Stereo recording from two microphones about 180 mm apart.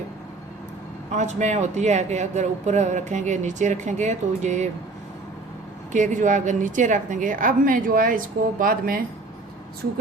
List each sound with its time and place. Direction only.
1.1 s speech: 40° right (ahead or behind)
5.9 s a woman's voice: 45° right (ahead or behind)